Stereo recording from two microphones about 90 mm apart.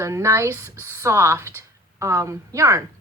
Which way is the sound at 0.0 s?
35° right (ahead or behind).